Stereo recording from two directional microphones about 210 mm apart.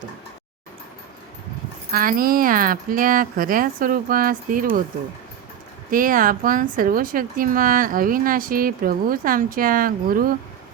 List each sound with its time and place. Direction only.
1.9 s speech: 45° right (ahead or behind)
5.9 s speech: 40° right (ahead or behind)